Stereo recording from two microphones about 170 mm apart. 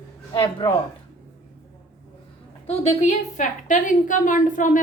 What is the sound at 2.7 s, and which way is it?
A woman's voice, 45° left (ahead or behind).